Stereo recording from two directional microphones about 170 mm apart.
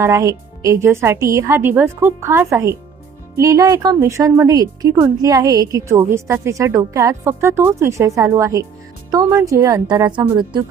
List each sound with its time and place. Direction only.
0.0 s a woman's voice: 15° right (ahead or behind)